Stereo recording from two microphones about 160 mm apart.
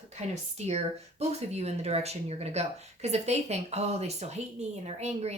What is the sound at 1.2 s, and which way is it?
A woman's voice, 40° right (ahead or behind).